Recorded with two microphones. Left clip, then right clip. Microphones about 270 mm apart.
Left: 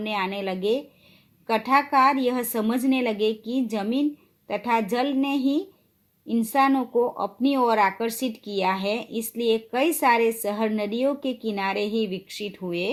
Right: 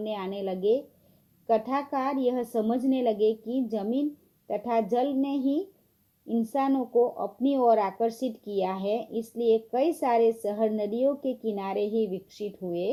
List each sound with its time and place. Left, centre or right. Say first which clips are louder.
0.0 s speech: left 5 dB; left
7.2 s speech: left 3 dB; left